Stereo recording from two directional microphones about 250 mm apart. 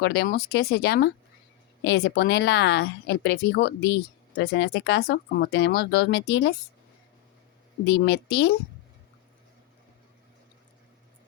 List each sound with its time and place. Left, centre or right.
0.0 s speech: left
7.9 s speech: left